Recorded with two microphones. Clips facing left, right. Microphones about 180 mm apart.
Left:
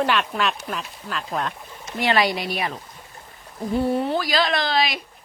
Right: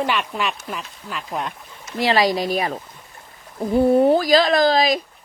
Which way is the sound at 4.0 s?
45° right (ahead or behind).